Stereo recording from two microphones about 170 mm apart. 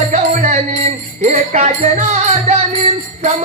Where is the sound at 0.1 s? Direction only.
50° right (ahead or behind).